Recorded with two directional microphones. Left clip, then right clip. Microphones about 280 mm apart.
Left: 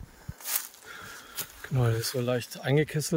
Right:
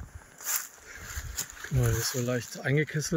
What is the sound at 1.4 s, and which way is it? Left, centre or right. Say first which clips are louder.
Speech: left 1 dB; centre.